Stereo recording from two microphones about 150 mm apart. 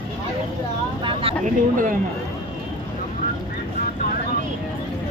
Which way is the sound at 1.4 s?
60° right (ahead or behind).